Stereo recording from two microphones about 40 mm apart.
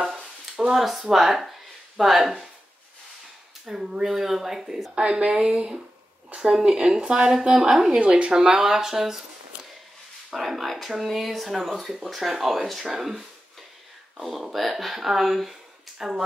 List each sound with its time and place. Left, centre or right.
0.0 s a sound: centre
2.0 s speech: centre
3.6 s speech: centre
10.3 s speech: centre